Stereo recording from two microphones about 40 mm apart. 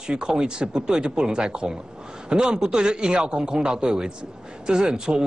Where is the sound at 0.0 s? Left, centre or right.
Centre.